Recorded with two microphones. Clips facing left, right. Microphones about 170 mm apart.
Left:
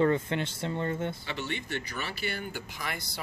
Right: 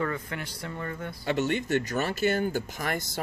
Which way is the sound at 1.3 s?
45° right (ahead or behind).